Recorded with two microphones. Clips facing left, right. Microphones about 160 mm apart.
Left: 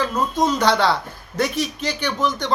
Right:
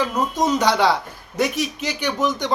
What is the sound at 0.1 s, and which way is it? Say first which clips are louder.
Speech: even; 15° right (ahead or behind).